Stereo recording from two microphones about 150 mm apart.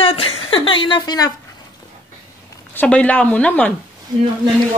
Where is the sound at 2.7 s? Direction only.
10° left (ahead or behind).